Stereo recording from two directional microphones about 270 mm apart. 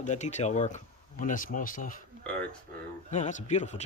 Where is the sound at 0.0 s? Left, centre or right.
Left.